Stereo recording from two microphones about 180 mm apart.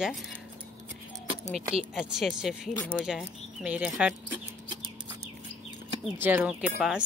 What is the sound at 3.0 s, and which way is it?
Speech, 5° right (ahead or behind).